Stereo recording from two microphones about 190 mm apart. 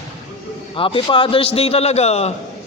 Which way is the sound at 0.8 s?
25° left (ahead or behind).